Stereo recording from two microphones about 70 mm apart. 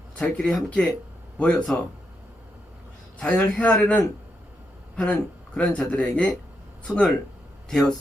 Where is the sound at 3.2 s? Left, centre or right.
Centre.